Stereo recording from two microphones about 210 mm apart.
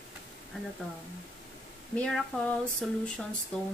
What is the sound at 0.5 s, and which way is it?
Speech, 5° left (ahead or behind).